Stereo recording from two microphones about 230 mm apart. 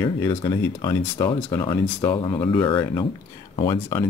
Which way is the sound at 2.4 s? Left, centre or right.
Centre.